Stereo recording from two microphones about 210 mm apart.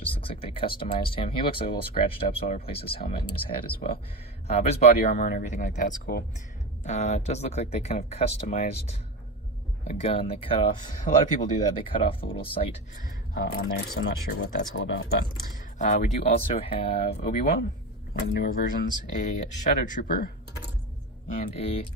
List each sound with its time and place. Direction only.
0.0 s speech: 25° left (ahead or behind); by 6.2 s 45° left (ahead or behind)
6.8 s speech: 35° left (ahead or behind)
11.8 s speech: 25° left (ahead or behind)
13.1 s speech: 45° left (ahead or behind)
14.3 s speech: 70° left (ahead or behind)
15.8 s speech: 35° left (ahead or behind)
18.1 s speech: 45° left (ahead or behind); by 21.8 s 30° left (ahead or behind)